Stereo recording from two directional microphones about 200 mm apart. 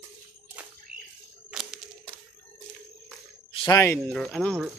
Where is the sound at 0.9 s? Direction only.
5° right (ahead or behind).